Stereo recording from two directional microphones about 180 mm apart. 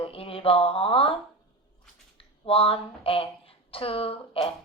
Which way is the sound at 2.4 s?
30° left (ahead or behind).